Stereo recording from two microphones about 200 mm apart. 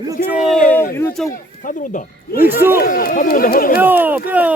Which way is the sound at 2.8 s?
50° left (ahead or behind).